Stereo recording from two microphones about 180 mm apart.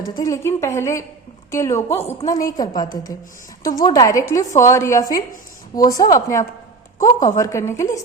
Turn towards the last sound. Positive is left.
turn(degrees=15)  # may be behind; listen again after turning